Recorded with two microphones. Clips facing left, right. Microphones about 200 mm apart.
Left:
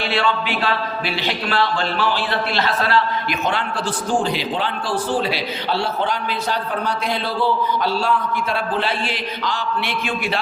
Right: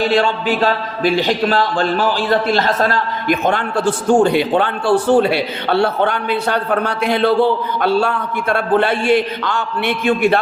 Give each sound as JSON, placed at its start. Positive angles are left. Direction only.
{"t": 0.0, "sound": "a man's voice", "side_deg": -45}